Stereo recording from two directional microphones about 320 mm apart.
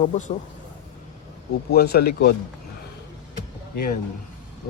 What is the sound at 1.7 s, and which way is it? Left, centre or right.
Speech, left.